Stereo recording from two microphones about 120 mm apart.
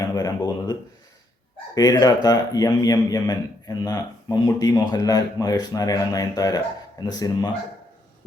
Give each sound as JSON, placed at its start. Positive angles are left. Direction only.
{"t": 0.0, "sound": "speech", "side_deg": 30}